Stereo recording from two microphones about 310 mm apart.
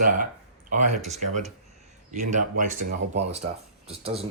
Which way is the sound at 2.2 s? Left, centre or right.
Right.